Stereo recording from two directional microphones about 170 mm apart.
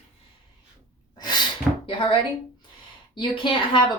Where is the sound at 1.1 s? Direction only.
25° left (ahead or behind).